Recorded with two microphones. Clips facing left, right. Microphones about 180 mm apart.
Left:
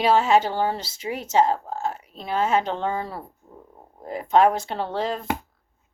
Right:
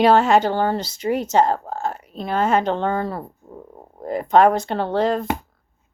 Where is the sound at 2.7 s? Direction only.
60° right (ahead or behind).